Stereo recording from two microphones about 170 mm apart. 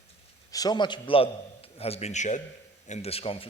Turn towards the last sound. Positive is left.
turn(degrees=35)  # may be behind; listen again after turning